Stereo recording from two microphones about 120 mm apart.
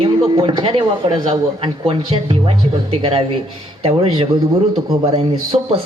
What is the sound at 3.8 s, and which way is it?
Speech, 50° right (ahead or behind).